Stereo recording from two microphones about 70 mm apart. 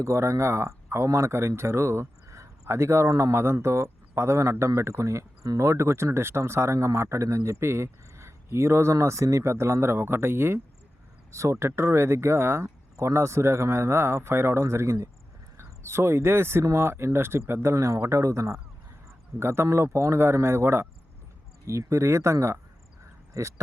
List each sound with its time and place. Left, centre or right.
0.0 s speech: right
3.3 s speech: right
11.3 s speech: right
12.6 s speech: right